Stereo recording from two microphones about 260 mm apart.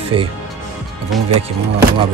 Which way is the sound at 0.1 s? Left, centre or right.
Centre.